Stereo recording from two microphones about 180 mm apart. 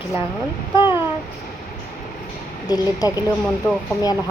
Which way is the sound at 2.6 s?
20° left (ahead or behind).